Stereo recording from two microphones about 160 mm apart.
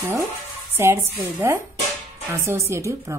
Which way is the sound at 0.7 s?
15° right (ahead or behind).